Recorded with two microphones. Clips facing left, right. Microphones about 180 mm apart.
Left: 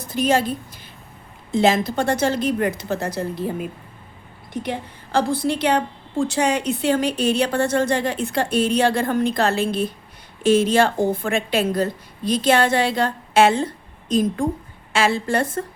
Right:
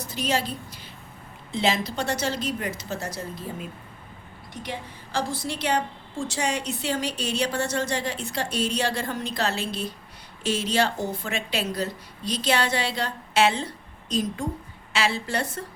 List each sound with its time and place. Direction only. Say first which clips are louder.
0.0 s a woman's voice: left 7 dB; 50° left (ahead or behind)